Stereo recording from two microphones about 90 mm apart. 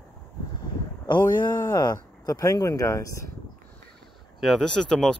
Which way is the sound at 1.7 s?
45° left (ahead or behind).